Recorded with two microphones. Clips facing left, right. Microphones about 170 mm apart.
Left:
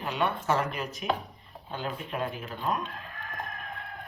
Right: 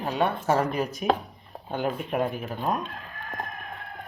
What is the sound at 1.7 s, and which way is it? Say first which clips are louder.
Speech: right 7 dB; 50° right (ahead or behind).